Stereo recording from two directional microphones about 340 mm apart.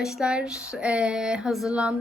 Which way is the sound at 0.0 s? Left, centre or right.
Centre.